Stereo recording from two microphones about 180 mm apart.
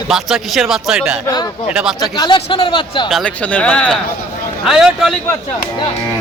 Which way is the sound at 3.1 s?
5° left (ahead or behind).